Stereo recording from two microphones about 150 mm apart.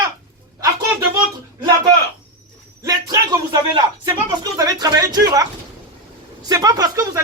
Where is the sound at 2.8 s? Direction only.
25° right (ahead or behind).